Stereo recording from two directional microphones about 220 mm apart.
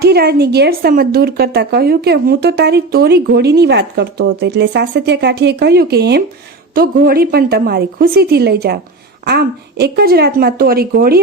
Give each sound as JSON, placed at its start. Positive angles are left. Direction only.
{"t": 0.0, "sound": "a woman's voice", "side_deg": -45}